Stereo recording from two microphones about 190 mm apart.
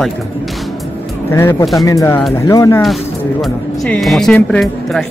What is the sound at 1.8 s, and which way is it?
Speech, 15° left (ahead or behind).